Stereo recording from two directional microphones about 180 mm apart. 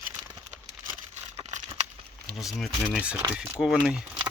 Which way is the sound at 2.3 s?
Centre (ahead or behind).